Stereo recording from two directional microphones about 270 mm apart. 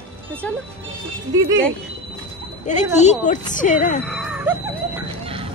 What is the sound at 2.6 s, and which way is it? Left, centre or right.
A woman's voice, left.